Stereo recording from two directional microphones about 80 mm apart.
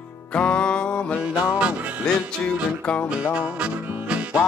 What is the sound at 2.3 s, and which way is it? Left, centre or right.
Music, centre.